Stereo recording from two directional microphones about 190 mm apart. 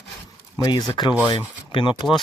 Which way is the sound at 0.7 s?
20° left (ahead or behind).